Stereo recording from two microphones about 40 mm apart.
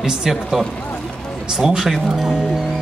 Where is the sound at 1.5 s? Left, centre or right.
Centre.